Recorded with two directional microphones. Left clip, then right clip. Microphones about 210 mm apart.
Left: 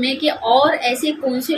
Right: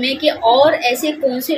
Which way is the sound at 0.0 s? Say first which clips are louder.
Right 4 dB; 5° left (ahead or behind).